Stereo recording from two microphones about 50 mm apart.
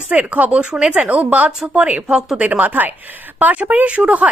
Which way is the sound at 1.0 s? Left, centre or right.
Right.